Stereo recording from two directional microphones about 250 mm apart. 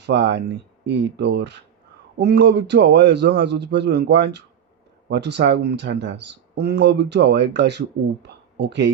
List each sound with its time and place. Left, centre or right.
0.0 s speech: right